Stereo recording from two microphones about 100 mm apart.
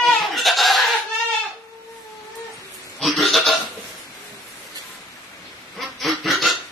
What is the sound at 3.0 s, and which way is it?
Goat, centre (ahead or behind).